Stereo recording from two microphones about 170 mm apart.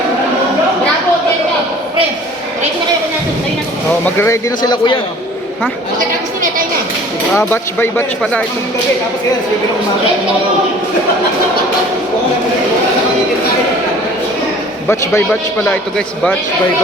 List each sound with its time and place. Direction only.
4.0 s speech: 15° left (ahead or behind)
7.3 s a man's voice: 10° left (ahead or behind)
14.8 s a man's voice: 15° left (ahead or behind)